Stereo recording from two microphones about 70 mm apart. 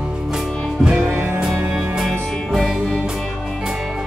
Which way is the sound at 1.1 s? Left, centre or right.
Right.